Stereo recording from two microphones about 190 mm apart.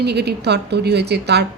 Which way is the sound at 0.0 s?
60° right (ahead or behind).